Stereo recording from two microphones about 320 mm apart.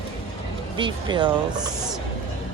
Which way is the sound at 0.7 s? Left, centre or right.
Centre.